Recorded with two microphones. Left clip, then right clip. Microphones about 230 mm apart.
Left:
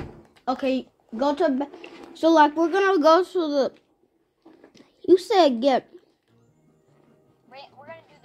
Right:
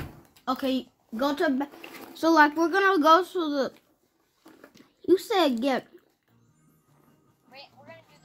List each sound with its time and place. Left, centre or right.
0.5 s speech: centre
4.7 s a sound: centre
7.5 s music: left